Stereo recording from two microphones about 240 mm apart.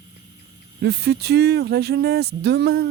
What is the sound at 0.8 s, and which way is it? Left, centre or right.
Speech, right.